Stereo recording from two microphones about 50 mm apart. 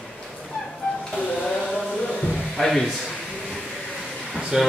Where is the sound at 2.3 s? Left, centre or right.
Centre.